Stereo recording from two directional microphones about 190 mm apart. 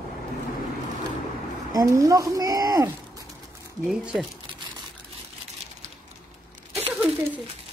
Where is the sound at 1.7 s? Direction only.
15° right (ahead or behind).